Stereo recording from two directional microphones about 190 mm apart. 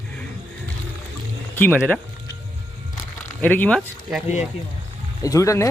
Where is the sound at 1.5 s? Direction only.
10° left (ahead or behind).